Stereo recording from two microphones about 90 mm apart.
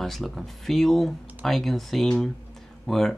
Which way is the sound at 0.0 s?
Centre (ahead or behind).